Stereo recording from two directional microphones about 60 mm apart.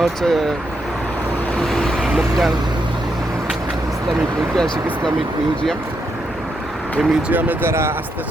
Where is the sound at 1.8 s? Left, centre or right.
Centre.